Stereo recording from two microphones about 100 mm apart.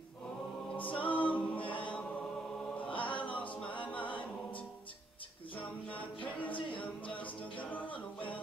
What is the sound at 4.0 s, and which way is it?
A capella, 55° left (ahead or behind).